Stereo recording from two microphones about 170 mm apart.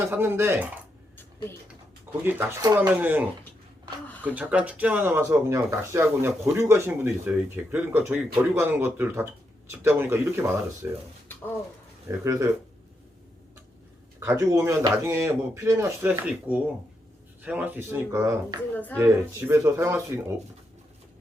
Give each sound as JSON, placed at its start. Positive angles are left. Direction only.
{"t": 0.0, "sound": "speech", "side_deg": -15}
{"t": 2.2, "sound": "speech", "side_deg": -10}
{"t": 12.0, "sound": "speech", "side_deg": -15}
{"t": 14.3, "sound": "speech", "side_deg": -20}